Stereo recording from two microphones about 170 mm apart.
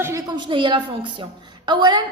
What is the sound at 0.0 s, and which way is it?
A woman's voice, 20° right (ahead or behind).